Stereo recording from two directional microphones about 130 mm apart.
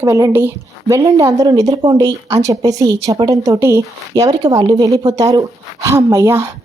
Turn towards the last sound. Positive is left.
turn(degrees=-20)  # may be behind; listen again after turning